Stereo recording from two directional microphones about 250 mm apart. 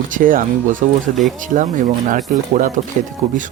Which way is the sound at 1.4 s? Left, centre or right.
Right.